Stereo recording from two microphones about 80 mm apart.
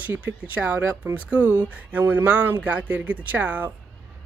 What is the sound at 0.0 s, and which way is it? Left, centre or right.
Speech, centre.